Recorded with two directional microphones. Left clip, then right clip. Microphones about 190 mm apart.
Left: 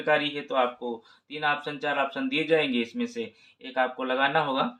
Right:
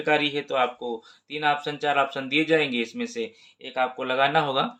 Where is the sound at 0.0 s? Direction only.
40° right (ahead or behind).